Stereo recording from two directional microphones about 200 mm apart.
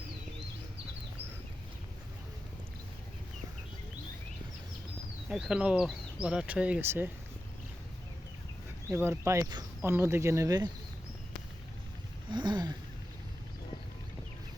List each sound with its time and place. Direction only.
5.3 s speech: 5° right (ahead or behind)
8.9 s speech: 10° right (ahead or behind)
12.3 s a sound: 20° right (ahead or behind)